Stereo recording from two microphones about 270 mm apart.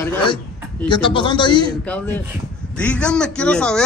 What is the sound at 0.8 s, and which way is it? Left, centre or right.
A man's voice, centre.